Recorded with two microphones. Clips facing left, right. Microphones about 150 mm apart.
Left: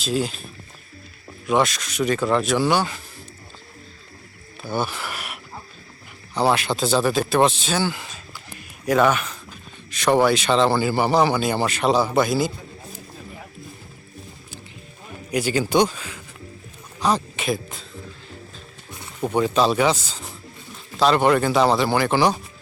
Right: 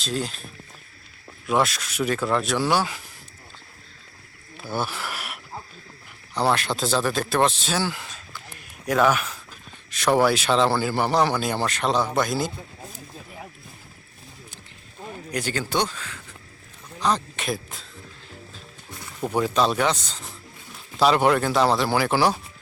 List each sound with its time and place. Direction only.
0.0 s speech: 5° left (ahead or behind)
1.5 s speech: centre (ahead or behind)
4.7 s speech: centre (ahead or behind)
15.3 s speech: 10° left (ahead or behind)
17.0 s a sound: 10° left (ahead or behind)
19.2 s speech: centre (ahead or behind)
21.0 s speech: 5° right (ahead or behind)